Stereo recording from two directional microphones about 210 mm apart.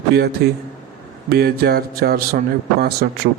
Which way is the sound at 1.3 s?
50° right (ahead or behind).